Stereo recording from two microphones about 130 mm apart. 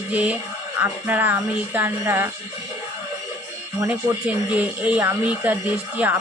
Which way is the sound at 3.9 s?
10° right (ahead or behind).